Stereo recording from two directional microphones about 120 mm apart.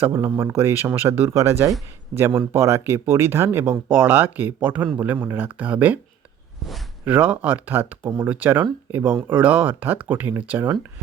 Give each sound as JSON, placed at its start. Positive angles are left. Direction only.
{"t": 0.0, "sound": "speech", "side_deg": -20}
{"t": 7.0, "sound": "speech", "side_deg": -15}